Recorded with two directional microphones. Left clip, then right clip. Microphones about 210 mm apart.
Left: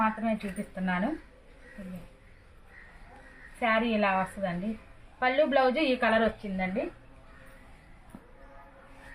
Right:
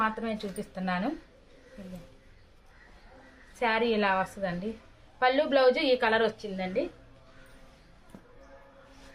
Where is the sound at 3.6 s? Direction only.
55° right (ahead or behind).